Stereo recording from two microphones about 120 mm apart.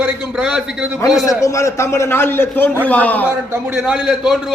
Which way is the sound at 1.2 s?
25° left (ahead or behind).